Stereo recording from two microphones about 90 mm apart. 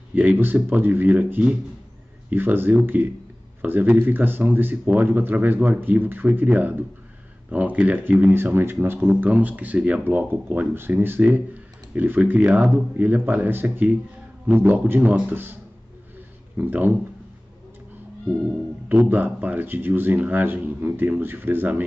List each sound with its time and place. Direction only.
0.1 s speech: 20° right (ahead or behind)
16.5 s speech: 20° right (ahead or behind)
18.9 s speech: 20° right (ahead or behind)